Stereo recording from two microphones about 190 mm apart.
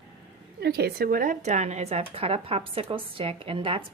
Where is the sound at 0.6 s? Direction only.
55° right (ahead or behind).